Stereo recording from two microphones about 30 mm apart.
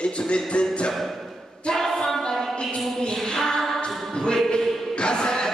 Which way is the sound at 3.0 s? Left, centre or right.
Left.